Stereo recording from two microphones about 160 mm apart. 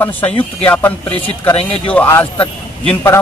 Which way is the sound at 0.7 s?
10° left (ahead or behind).